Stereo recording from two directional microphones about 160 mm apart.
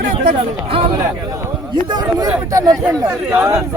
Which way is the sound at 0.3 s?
35° right (ahead or behind).